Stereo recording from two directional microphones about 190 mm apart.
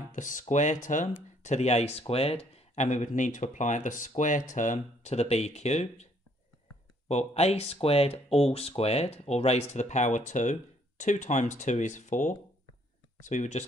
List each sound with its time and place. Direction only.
0.1 s speech: 40° left (ahead or behind)
7.1 s speech: 35° left (ahead or behind)